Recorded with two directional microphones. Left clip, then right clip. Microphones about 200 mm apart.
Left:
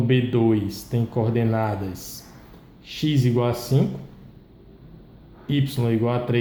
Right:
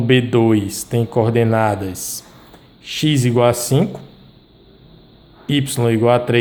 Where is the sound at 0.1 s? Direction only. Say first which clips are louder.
Right 7 dB; 35° right (ahead or behind).